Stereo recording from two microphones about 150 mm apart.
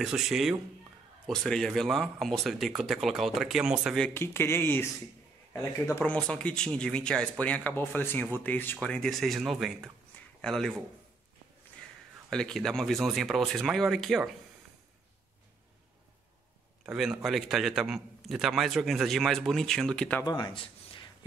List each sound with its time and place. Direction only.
0.0 s a man's voice: 5° right (ahead or behind)
4.0 s a man's voice: 15° left (ahead or behind)
12.3 s a man's voice: 5° left (ahead or behind)
16.8 s a man's voice: 5° right (ahead or behind)
20.2 s speech: 30° left (ahead or behind)